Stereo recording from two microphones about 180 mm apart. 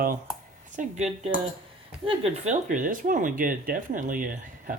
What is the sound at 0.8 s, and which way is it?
Speech, 40° right (ahead or behind).